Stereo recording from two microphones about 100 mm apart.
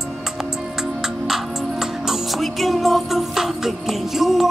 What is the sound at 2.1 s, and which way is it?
Music, centre (ahead or behind).